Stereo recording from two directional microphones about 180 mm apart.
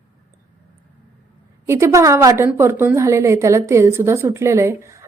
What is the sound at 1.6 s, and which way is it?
Speech, 15° right (ahead or behind).